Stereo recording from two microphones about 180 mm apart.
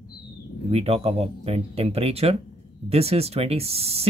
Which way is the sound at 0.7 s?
35° right (ahead or behind).